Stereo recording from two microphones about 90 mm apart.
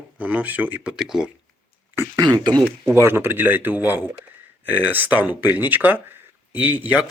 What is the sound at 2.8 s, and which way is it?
Speech, 30° right (ahead or behind).